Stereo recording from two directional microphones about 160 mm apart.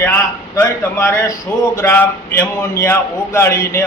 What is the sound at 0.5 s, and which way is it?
A man's voice, 15° left (ahead or behind).